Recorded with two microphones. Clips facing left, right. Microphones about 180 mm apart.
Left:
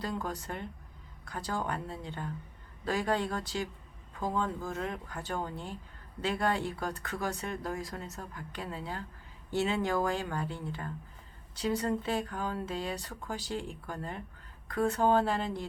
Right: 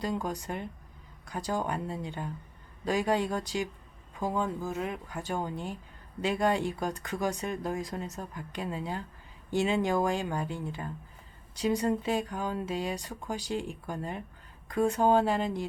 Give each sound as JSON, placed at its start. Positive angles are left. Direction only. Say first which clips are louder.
{"t": 0.0, "sound": "speech", "louder": "right 3 dB", "side_deg": -15}